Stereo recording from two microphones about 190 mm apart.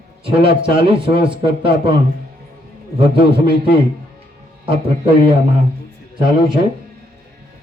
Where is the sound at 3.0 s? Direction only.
30° right (ahead or behind).